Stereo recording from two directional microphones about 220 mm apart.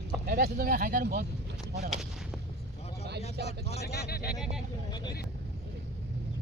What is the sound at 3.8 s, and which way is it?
Speech, 45° left (ahead or behind).